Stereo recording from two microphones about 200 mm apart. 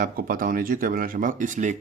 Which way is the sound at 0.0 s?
45° right (ahead or behind).